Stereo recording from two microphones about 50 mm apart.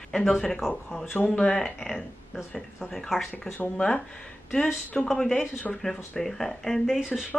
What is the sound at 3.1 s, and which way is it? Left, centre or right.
Speech, centre.